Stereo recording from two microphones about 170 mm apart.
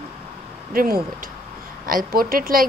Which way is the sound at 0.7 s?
55° right (ahead or behind).